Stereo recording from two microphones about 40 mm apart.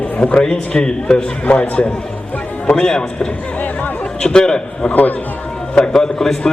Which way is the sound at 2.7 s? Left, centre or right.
Centre.